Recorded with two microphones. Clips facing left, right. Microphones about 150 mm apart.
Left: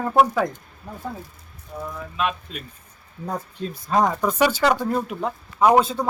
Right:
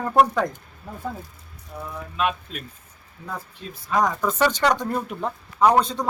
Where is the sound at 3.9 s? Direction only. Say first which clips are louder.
Left 2 dB; 30° left (ahead or behind).